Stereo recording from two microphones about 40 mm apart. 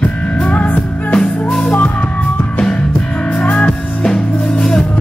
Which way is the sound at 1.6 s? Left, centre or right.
Left.